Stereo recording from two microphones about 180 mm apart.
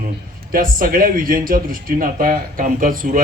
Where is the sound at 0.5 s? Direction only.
50° right (ahead or behind).